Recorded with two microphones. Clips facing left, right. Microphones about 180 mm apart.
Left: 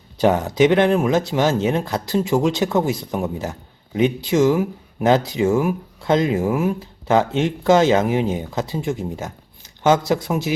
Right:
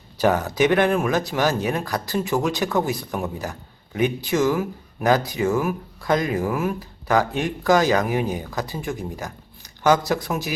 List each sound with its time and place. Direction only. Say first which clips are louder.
0.2 s speech: left 3 dB; 20° left (ahead or behind)